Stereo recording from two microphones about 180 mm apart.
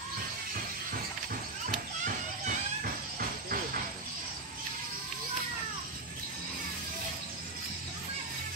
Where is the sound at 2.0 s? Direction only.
50° right (ahead or behind).